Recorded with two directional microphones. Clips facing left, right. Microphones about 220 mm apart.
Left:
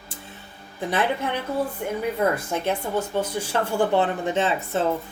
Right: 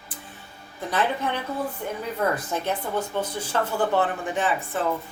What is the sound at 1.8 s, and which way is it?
Speech, 15° left (ahead or behind).